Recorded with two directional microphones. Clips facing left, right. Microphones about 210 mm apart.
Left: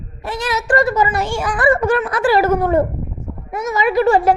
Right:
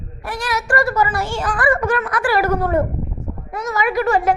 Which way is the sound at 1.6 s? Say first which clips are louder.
Left 4 dB; 25° left (ahead or behind).